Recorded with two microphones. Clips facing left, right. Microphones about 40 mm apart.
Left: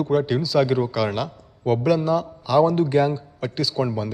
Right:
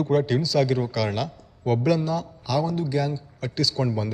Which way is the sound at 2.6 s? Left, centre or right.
Left.